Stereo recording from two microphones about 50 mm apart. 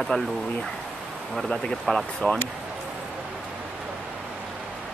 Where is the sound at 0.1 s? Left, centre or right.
Left.